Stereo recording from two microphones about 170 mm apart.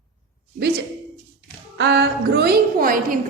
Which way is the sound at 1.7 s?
90° right.